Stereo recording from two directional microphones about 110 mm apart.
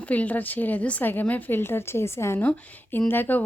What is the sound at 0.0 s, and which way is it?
Speech, 15° left (ahead or behind).